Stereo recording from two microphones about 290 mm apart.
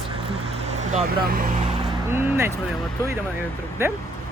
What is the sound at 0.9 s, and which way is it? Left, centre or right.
Speech, right.